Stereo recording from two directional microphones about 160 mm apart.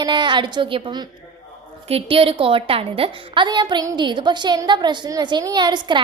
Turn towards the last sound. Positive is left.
turn(degrees=-25)  # may be behind; listen again after turning